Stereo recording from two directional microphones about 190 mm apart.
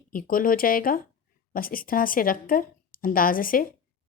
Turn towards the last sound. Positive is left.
turn(degrees=50)  # may be behind; listen again after turning